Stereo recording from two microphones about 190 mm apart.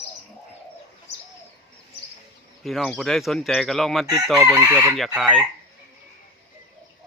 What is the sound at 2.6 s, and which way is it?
Speech, centre (ahead or behind).